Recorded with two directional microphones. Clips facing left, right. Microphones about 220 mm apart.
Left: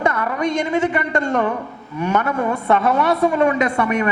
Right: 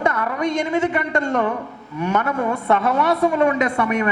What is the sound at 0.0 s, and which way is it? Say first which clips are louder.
A woman's voice: left 1 dB; 15° left (ahead or behind).